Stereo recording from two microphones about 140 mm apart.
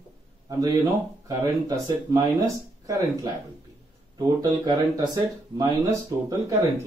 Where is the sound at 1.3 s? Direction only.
25° right (ahead or behind).